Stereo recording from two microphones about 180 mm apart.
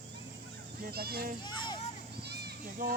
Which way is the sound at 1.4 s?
25° left (ahead or behind).